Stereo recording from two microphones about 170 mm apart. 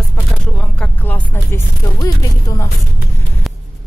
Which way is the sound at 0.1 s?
5° left (ahead or behind).